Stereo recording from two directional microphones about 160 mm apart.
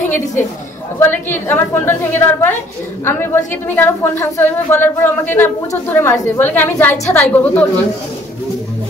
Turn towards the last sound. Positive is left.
turn(degrees=10)  # may be behind; listen again after turning